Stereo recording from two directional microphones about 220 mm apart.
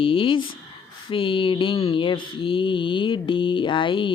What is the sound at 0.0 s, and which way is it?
Speech, 25° left (ahead or behind).